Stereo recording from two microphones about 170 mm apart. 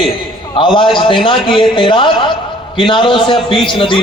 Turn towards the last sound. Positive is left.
turn(degrees=30)  # may be behind; listen again after turning